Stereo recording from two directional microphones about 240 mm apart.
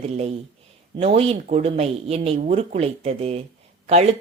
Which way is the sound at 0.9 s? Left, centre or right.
Right.